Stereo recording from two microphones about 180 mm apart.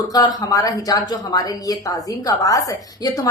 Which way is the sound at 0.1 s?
20° left (ahead or behind).